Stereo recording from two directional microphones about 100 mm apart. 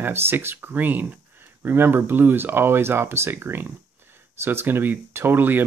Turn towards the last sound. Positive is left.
turn(degrees=-20)  # may be behind; listen again after turning